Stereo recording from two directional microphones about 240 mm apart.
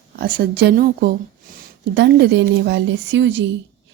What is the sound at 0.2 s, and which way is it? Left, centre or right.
Speech, right.